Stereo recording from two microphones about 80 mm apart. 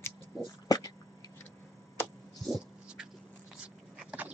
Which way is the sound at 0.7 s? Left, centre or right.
Left.